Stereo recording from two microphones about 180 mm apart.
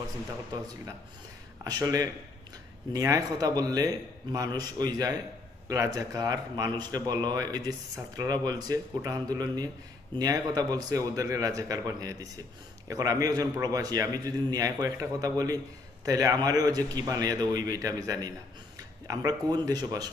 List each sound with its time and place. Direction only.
1.6 s a man's voice: 20° right (ahead or behind)